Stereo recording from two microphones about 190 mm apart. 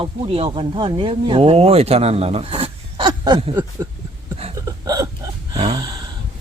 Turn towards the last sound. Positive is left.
turn(degrees=-30)  # may be behind; listen again after turning